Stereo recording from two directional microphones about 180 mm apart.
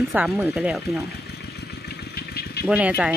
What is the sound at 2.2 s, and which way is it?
Vehicle, 60° left (ahead or behind).